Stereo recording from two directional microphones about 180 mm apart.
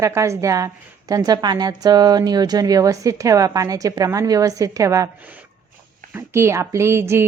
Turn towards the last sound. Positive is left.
turn(degrees=-15)  # may be behind; listen again after turning